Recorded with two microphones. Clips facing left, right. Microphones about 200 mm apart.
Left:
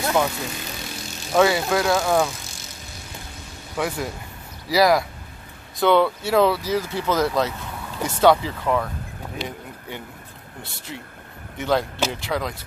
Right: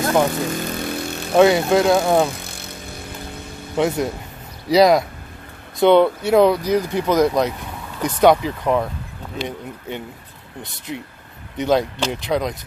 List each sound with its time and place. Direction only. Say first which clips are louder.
0.3 s vehicle: right 9 dB; 50° right (ahead or behind)
1.3 s speech: right 5 dB; 20° right (ahead or behind)
2.4 s vehicle: right 6 dB; 60° right (ahead or behind)
3.7 s speech: right 7 dB; 20° right (ahead or behind)
10.6 s speech: right 6 dB; 20° right (ahead or behind)